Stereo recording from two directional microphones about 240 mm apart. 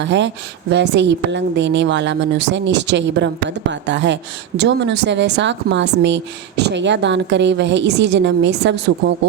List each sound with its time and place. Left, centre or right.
0.0 s a woman's voice: right